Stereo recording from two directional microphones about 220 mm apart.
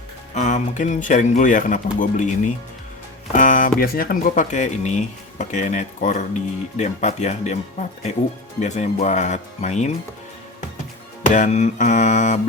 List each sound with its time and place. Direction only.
0.3 s speech: 35° left (ahead or behind)
11.3 s speech: 30° left (ahead or behind)